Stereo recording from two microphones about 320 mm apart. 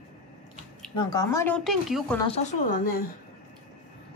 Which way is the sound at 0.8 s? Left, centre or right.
Centre.